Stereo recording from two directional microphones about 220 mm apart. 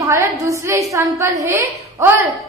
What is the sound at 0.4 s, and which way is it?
A woman's voice, 15° right (ahead or behind).